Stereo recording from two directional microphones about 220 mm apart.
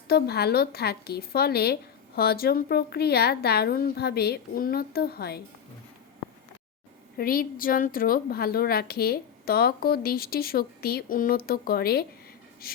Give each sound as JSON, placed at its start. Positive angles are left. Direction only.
{"t": 0.1, "sound": "a woman's voice", "side_deg": 45}
{"t": 7.2, "sound": "a woman's voice", "side_deg": 40}